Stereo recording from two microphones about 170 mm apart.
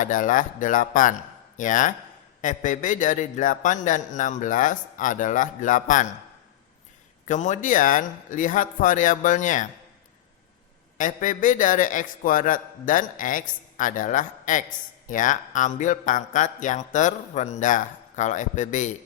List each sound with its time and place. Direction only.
0.0 s speech: 50° left (ahead or behind)
7.3 s speech: 45° left (ahead or behind)
10.9 s speech: 50° left (ahead or behind)